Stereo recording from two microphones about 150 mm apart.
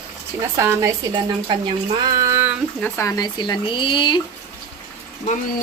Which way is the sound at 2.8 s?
20° left (ahead or behind).